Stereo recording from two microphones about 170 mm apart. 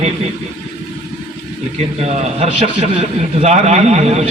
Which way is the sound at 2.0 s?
40° right (ahead or behind).